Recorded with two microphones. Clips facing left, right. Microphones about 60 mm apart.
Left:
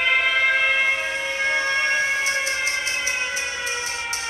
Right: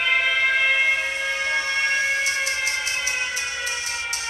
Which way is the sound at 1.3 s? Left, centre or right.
Left.